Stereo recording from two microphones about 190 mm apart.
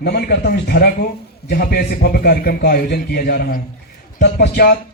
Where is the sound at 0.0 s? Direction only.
55° left (ahead or behind).